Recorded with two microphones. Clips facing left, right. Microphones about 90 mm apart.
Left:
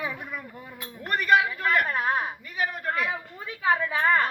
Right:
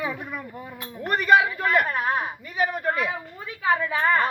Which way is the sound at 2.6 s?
15° right (ahead or behind).